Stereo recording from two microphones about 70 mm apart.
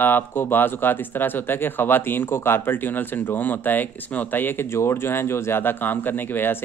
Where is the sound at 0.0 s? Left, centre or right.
Left.